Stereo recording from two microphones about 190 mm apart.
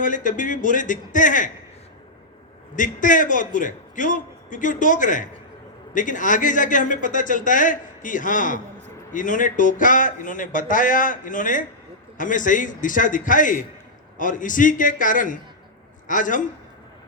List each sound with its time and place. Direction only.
0.0 s a man's voice: 45° left (ahead or behind)
2.7 s a man's voice: 45° left (ahead or behind)